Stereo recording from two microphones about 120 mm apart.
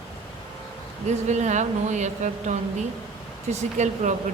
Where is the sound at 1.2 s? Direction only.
75° right (ahead or behind).